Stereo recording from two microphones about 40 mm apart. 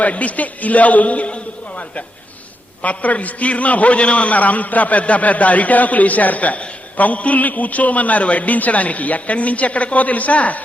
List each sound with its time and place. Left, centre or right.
0.0 s a man's voice: left
2.8 s a man's voice: left